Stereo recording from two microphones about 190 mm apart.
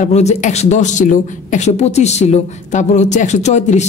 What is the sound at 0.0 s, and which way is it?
A woman's voice, 35° left (ahead or behind).